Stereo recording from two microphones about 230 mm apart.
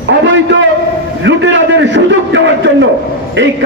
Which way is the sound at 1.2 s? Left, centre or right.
Right.